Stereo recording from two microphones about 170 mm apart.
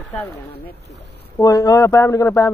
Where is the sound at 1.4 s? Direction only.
20° left (ahead or behind).